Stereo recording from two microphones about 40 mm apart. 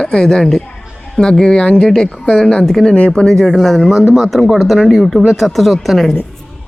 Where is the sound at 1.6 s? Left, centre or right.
Left.